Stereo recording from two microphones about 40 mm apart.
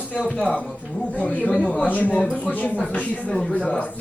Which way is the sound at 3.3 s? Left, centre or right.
Left.